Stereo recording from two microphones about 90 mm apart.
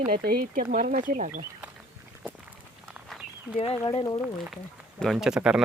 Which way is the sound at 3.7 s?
80° left.